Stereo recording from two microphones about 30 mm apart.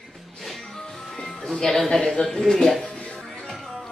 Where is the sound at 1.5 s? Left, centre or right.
Centre.